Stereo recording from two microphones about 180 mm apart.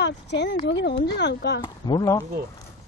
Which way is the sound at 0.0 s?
75° left (ahead or behind).